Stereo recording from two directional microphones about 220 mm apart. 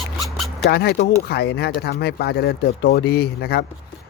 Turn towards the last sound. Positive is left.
turn(degrees=45)  # may be behind; listen again after turning